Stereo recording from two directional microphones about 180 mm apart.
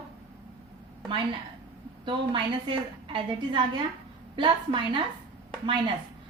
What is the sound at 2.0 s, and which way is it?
A woman's voice, 25° right (ahead or behind).